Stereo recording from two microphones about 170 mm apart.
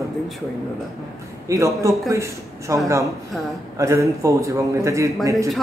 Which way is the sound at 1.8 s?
20° right (ahead or behind).